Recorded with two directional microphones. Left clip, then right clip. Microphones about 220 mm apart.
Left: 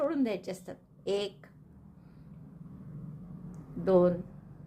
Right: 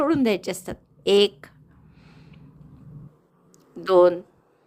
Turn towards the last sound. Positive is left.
turn(degrees=-40)  # may be behind; listen again after turning